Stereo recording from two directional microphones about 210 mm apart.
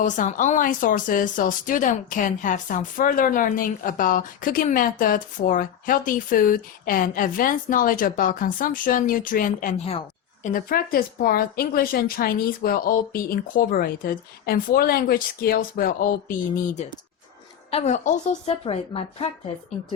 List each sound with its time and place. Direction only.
0.0 s speech: 40° left (ahead or behind)
17.7 s a woman's voice: 30° left (ahead or behind)